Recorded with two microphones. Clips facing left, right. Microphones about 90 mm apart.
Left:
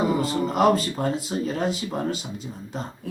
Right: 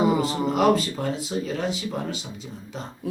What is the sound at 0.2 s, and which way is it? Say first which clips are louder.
Speech: left 1 dB; 40° left (ahead or behind).